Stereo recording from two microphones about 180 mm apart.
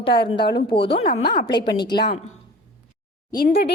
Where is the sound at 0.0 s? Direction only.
30° left (ahead or behind).